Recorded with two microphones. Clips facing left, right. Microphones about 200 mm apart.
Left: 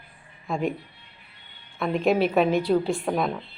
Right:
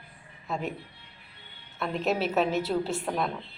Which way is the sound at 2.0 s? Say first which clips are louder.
Left 5 dB; 55° left (ahead or behind).